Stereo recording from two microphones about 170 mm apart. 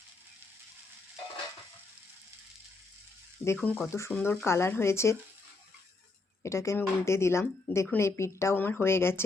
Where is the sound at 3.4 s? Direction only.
10° left (ahead or behind).